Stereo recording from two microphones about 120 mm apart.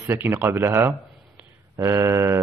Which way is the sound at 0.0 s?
20° right (ahead or behind).